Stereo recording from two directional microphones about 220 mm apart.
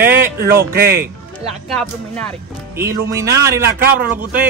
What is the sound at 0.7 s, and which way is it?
Speech, 45° right (ahead or behind).